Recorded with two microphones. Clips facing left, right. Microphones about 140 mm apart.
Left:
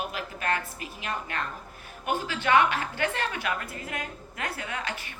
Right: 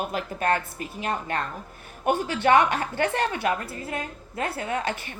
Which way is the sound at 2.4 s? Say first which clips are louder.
Right 3 dB; 35° right (ahead or behind).